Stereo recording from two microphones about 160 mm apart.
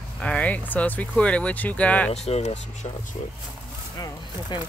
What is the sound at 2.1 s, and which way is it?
Speech, 40° left (ahead or behind).